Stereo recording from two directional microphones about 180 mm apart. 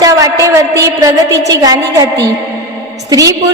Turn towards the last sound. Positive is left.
turn(degrees=-20)  # may be behind; listen again after turning